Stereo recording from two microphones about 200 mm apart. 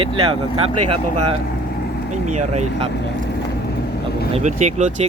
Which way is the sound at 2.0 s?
35° right (ahead or behind).